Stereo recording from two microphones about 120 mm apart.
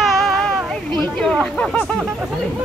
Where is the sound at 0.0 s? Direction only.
5° left (ahead or behind).